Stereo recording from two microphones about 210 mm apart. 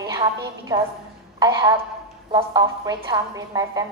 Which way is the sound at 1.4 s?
20° right (ahead or behind).